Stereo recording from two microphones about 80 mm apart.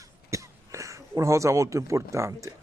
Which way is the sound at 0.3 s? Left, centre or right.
Right.